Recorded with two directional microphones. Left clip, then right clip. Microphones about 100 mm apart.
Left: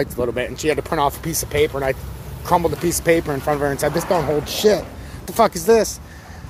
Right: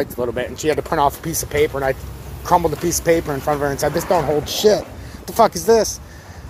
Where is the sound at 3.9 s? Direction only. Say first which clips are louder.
Right 1 dB; centre (ahead or behind).